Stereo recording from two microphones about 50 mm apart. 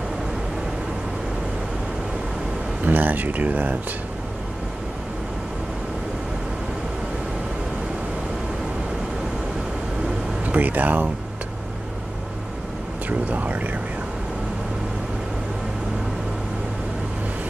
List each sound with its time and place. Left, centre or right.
2.8 s speech: right
10.4 s speech: right
13.3 s speech: right